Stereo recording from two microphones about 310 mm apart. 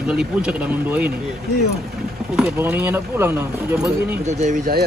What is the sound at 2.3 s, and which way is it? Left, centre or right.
Speech, centre.